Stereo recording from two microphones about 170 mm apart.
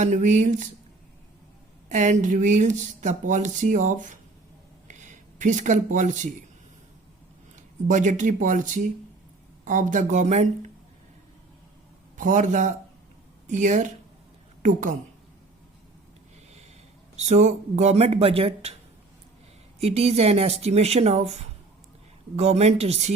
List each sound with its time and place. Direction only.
0.0 s speech: 45° right (ahead or behind)
1.9 s speech: 45° right (ahead or behind)
7.5 s speech: 45° right (ahead or behind)
12.1 s a man's voice: 50° right (ahead or behind)
17.2 s speech: 45° right (ahead or behind)
19.8 s speech: 40° right (ahead or behind)